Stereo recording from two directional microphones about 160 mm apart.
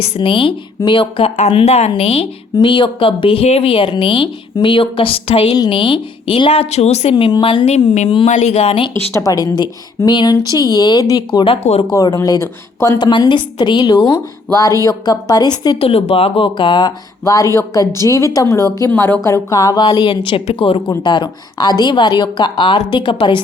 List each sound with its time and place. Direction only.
0.2 s speech: 35° left (ahead or behind)
8.3 s speech: 45° left (ahead or behind)
9.1 s a woman's voice: 20° left (ahead or behind)
11.3 s speech: 35° left (ahead or behind)
11.9 s a woman's voice: 25° left (ahead or behind)
13.0 s a woman's voice: 30° left (ahead or behind)